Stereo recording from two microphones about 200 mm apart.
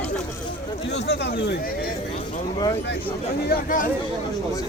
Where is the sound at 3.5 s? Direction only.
45° left (ahead or behind).